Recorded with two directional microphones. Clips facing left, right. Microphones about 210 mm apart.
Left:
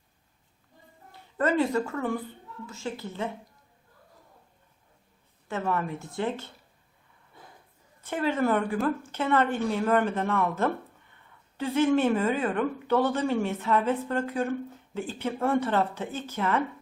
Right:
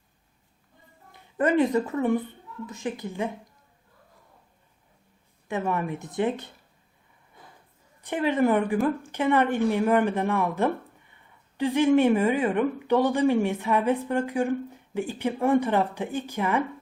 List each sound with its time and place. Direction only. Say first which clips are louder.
1.1 s a woman's voice: right 3 dB; 15° right (ahead or behind)
5.5 s a woman's voice: right 2 dB; 15° right (ahead or behind)
8.0 s a woman's voice: right 3 dB; 15° right (ahead or behind)